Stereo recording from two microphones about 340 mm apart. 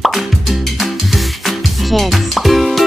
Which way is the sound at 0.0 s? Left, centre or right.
Centre.